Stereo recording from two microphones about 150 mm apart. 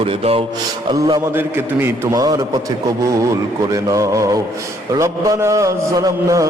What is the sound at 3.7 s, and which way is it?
A man's voice, 20° right (ahead or behind).